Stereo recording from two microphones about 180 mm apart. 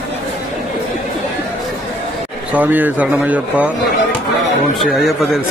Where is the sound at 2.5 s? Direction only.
10° right (ahead or behind).